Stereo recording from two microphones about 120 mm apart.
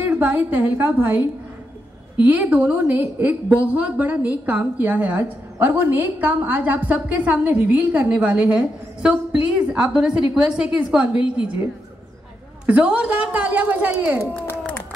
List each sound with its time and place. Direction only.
0.2 s a woman's voice: 15° right (ahead or behind)
12.6 s a woman's voice: 10° right (ahead or behind)